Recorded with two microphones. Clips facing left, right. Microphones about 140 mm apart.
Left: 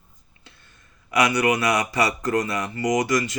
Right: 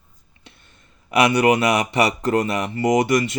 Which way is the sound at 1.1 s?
25° right (ahead or behind).